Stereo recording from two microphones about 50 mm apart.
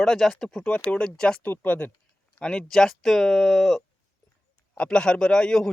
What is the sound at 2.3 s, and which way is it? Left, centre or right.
Speech, centre.